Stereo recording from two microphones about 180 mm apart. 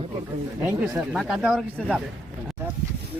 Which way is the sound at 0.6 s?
10° right (ahead or behind).